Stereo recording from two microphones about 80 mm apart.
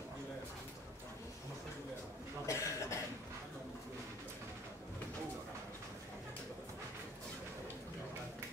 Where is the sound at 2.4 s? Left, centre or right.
Left.